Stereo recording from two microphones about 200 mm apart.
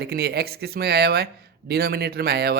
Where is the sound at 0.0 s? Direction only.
50° right (ahead or behind).